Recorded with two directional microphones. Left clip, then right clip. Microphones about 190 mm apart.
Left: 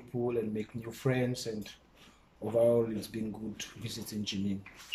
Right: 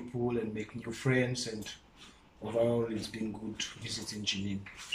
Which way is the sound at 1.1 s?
15° left (ahead or behind).